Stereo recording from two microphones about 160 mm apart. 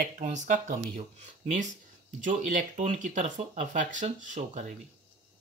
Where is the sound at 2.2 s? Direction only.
50° right (ahead or behind).